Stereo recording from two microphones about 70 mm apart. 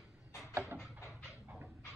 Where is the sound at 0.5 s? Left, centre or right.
Right.